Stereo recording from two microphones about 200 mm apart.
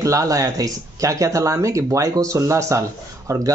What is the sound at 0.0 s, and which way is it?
Speech, 15° right (ahead or behind).